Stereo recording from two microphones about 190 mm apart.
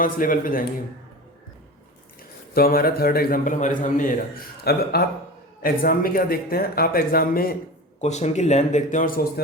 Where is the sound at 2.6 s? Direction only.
50° left (ahead or behind).